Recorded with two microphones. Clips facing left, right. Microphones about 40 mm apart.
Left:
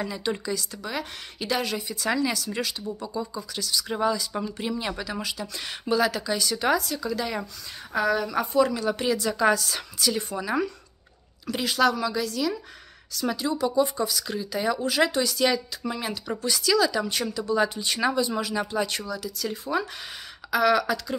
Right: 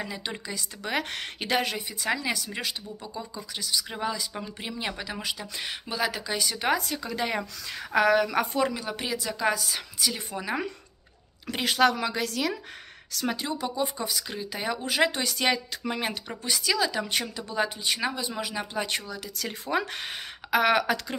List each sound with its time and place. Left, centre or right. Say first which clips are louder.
0.0 s a woman's voice: left 5 dB; centre
0.8 s a woman's voice: right 6 dB; right
7.9 s a woman's voice: right 2 dB; right
8.7 s a woman's voice: left 6 dB; centre
11.4 s speech: even; right
13.3 s speech: left 6 dB; right
16.3 s speech: left 8 dB; right
19.3 s speech: even; right
20.5 s speech: left 1 dB; right